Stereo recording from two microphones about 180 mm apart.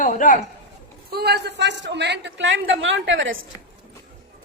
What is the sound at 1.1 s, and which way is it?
A man's voice, 65° right (ahead or behind).